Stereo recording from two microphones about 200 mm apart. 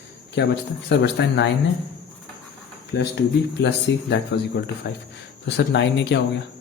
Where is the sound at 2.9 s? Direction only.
60° left (ahead or behind).